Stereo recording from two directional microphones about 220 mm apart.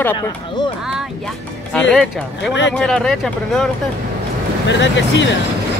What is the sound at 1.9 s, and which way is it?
Speech, centre (ahead or behind).